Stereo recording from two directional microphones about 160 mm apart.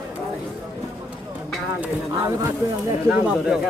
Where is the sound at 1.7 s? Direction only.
15° right (ahead or behind).